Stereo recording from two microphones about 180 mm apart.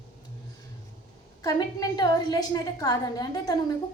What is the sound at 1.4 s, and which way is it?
A woman's voice, 20° left (ahead or behind).